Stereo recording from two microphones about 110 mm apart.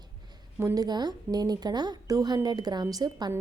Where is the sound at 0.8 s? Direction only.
40° right (ahead or behind).